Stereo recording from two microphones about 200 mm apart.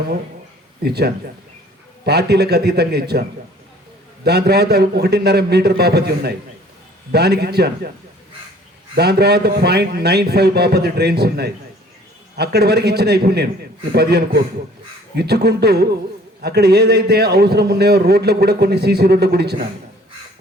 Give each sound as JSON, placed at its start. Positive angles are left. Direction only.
{"t": 0.8, "sound": "a man's voice", "side_deg": -55}
{"t": 9.0, "sound": "a man's voice", "side_deg": -55}